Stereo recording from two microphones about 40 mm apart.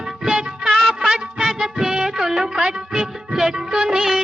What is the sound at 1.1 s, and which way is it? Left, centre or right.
Music, centre.